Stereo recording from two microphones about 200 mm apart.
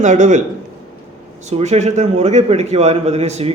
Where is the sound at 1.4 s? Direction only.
35° right (ahead or behind).